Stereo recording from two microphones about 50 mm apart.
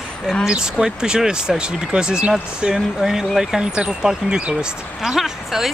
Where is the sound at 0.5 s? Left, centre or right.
Centre.